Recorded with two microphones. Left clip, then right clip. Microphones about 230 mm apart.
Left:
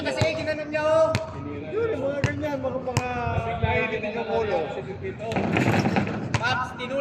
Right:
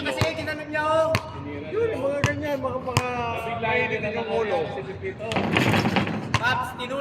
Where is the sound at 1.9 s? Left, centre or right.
Centre.